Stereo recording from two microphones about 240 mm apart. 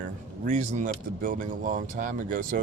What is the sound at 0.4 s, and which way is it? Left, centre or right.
Speech, right.